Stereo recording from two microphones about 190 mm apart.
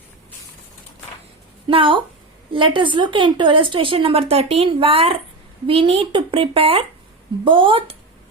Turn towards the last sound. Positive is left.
turn(degrees=-30)  # may be behind; listen again after turning